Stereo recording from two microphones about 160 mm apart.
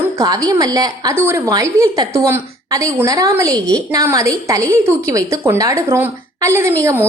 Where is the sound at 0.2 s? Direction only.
20° right (ahead or behind).